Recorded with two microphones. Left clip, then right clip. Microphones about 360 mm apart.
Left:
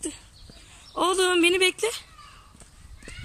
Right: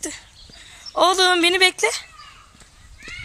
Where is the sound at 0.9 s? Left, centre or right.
Centre.